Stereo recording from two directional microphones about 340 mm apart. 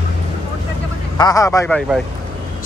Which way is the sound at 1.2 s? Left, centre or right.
Centre.